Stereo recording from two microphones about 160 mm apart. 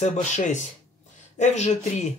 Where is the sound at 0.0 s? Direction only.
45° left (ahead or behind).